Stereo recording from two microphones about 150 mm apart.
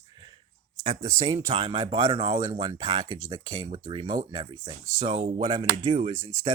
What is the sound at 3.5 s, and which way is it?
Speech, 40° right (ahead or behind).